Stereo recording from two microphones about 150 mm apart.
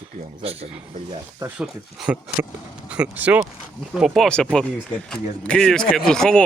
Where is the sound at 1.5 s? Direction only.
5° right (ahead or behind).